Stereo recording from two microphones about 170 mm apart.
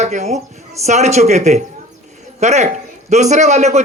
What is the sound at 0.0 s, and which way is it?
Speech, 45° right (ahead or behind).